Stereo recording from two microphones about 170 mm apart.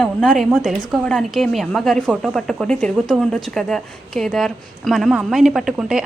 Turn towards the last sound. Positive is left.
turn(degrees=-5)  # may be behind; listen again after turning